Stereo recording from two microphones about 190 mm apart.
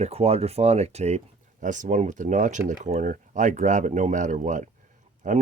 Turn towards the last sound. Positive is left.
turn(degrees=-45)  # may be behind; listen again after turning